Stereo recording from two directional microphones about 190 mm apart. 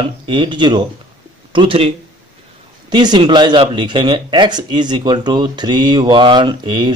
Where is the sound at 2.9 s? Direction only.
25° right (ahead or behind).